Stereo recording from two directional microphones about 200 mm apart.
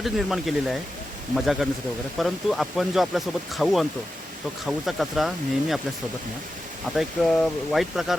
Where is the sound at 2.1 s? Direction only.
Centre (ahead or behind).